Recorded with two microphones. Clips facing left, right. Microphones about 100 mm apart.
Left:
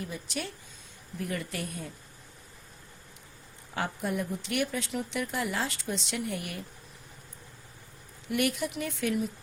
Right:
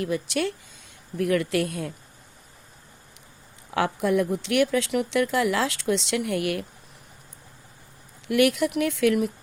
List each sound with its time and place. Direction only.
0.0 s speech: 85° right
3.7 s speech: 90° right
8.3 s speech: 90° right